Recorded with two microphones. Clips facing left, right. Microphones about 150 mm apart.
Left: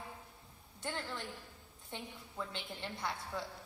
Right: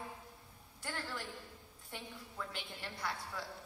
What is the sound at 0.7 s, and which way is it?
A man's voice, 25° left (ahead or behind).